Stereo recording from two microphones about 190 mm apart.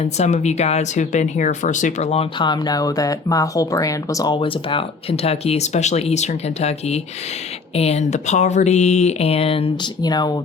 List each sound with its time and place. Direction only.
0.0 s speech: 35° left (ahead or behind); by 10.3 s 20° left (ahead or behind)